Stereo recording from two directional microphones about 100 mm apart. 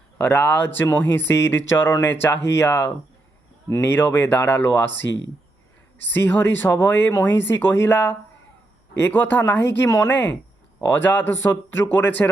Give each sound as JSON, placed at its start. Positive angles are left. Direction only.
{"t": 0.2, "sound": "speech", "side_deg": 15}
{"t": 6.1, "sound": "speech", "side_deg": 20}